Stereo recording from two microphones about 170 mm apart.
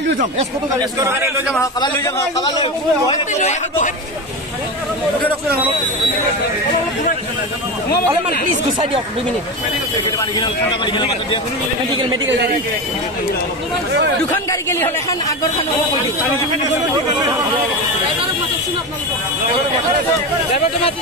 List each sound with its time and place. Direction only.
0.7 s a man's voice: 15° right (ahead or behind)
2.0 s a man's voice: 15° left (ahead or behind)
3.3 s a man's voice: 45° left (ahead or behind)
10.1 s a man's voice: 25° left (ahead or behind)
14.3 s a man's voice: 15° left (ahead or behind)